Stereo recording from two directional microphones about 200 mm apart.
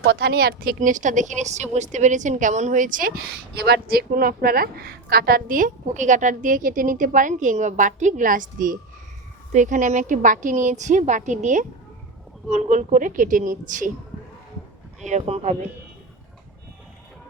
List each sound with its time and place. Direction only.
0.0 s a woman's voice: 55° right (ahead or behind); by 13.9 s 40° right (ahead or behind)
15.0 s a woman's voice: 35° right (ahead or behind)